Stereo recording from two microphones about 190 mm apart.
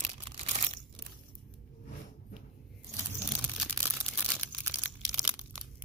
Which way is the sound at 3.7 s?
10° right (ahead or behind).